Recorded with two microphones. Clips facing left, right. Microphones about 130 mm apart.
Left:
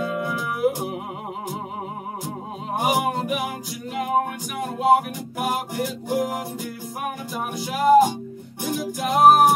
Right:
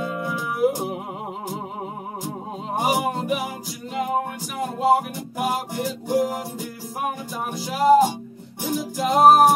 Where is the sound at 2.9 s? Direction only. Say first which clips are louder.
Even; 5° left (ahead or behind).